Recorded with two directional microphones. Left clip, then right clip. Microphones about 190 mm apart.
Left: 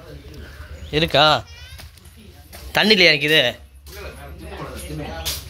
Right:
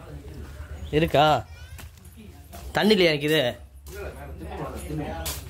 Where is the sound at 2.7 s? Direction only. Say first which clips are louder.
Left 6 dB; 15° right (ahead or behind).